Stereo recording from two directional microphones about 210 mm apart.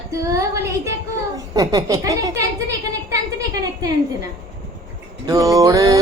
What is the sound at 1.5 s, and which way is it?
Speech, 15° right (ahead or behind).